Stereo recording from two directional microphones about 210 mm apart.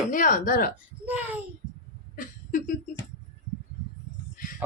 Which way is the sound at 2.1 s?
40° left (ahead or behind).